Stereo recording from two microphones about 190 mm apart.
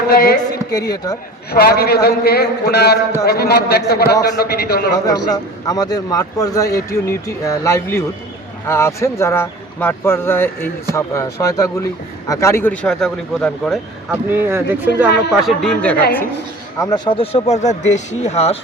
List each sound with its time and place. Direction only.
0.1 s speech: 55° left (ahead or behind)
0.7 s a man's voice: 20° left (ahead or behind)
1.5 s a man's voice: 55° left (ahead or behind)
5.0 s a man's voice: 20° left (ahead or behind); by 14.2 s 5° left (ahead or behind)
14.3 s speech: 10° right (ahead or behind)
15.3 s speech: centre (ahead or behind)
16.8 s speech: 25° left (ahead or behind)